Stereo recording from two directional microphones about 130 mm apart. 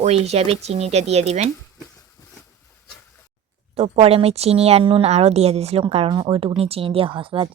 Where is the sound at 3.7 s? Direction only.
50° right (ahead or behind).